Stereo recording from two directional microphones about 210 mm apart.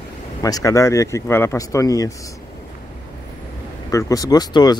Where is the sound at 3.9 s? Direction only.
15° left (ahead or behind).